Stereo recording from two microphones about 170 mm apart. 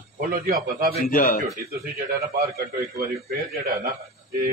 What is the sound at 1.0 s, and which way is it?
Speech, 60° left (ahead or behind).